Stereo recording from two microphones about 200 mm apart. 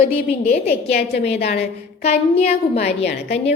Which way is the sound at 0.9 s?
55° left (ahead or behind).